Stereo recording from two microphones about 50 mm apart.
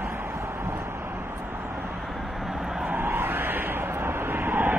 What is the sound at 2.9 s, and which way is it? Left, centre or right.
Vehicle, right.